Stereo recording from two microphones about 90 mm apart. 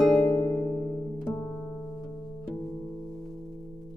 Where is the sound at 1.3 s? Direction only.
5° left (ahead or behind).